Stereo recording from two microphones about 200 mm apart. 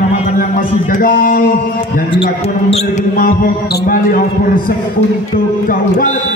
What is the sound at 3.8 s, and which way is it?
Speech, 45° left (ahead or behind).